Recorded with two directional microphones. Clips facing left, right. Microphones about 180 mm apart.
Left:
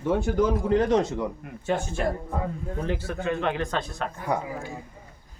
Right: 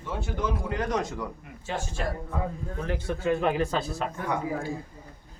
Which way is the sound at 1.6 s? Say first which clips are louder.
Left 6 dB; 55° left (ahead or behind).